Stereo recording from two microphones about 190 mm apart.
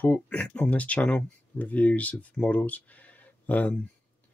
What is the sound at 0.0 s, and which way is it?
Speech, 5° left (ahead or behind).